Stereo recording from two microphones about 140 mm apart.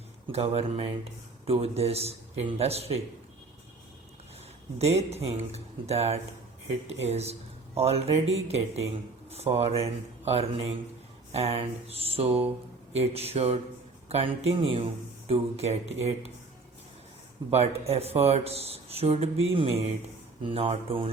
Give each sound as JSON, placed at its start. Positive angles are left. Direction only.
{"t": 0.3, "sound": "speech", "side_deg": -45}
{"t": 4.8, "sound": "speech", "side_deg": -50}
{"t": 17.5, "sound": "speech", "side_deg": -50}